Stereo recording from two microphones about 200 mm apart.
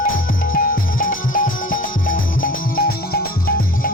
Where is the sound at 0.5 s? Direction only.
45° left (ahead or behind).